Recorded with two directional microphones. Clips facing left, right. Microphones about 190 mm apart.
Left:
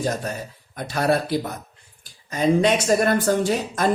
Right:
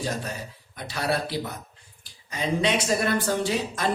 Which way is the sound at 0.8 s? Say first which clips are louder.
Left 6 dB; 50° left (ahead or behind).